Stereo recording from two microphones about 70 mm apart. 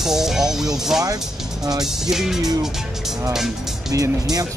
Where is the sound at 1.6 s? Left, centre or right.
Right.